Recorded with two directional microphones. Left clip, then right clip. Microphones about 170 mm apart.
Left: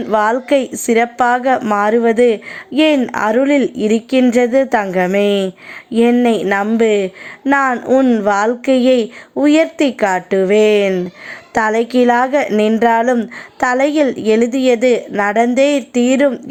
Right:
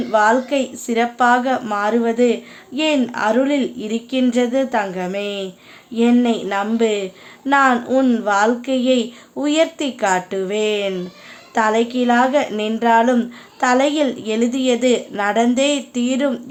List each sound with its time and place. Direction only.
0.1 s speech: 55° left (ahead or behind); by 1.8 s 35° left (ahead or behind)
1.8 s speech: 50° left (ahead or behind)
7.9 s speech: 30° left (ahead or behind)
8.3 s speech: 45° left (ahead or behind)